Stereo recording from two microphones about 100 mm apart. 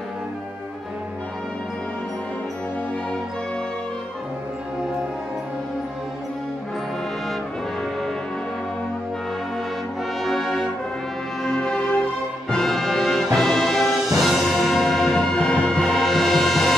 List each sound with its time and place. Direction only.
10.2 s brass instrument: centre (ahead or behind)
11.4 s music: 5° left (ahead or behind)